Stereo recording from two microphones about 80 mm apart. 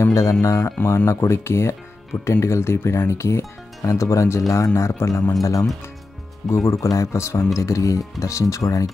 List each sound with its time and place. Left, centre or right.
0.0 s speech: left